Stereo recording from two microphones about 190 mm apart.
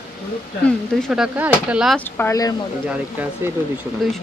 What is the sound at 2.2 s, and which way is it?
Speech, 15° left (ahead or behind).